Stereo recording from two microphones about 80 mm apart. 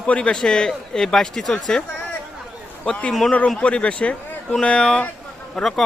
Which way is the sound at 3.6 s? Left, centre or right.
Centre.